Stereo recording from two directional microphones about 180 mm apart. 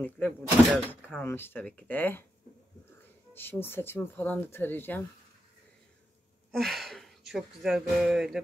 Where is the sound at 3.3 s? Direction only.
10° left (ahead or behind).